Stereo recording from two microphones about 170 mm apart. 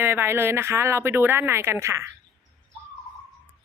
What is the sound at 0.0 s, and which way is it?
Speech, 15° right (ahead or behind).